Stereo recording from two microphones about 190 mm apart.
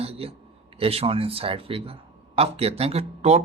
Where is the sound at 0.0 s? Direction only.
30° right (ahead or behind).